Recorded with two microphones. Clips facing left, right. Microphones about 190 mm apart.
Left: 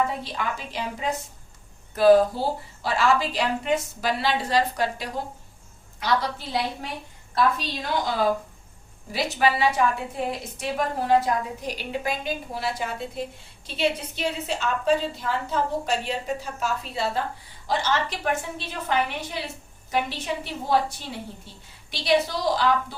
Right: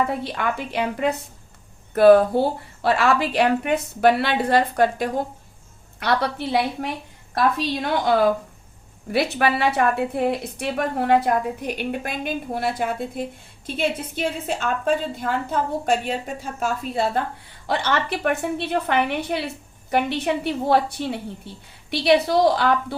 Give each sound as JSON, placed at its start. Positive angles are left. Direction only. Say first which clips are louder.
{"t": 0.1, "sound": "a woman's voice", "louder": "right 5 dB", "side_deg": -60}
{"t": 6.0, "sound": "a woman's voice", "louder": "right 3 dB", "side_deg": -60}
{"t": 17.7, "sound": "a woman's voice", "louder": "right 2 dB", "side_deg": -60}